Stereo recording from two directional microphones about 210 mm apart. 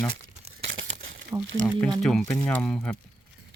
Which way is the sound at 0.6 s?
60° right (ahead or behind).